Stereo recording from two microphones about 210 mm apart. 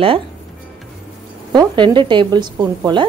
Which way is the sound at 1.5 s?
20° right (ahead or behind).